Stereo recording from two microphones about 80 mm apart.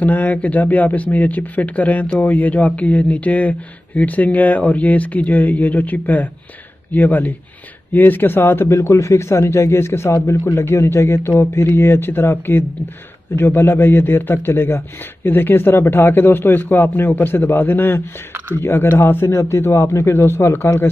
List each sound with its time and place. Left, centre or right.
0.0 s a man's voice: left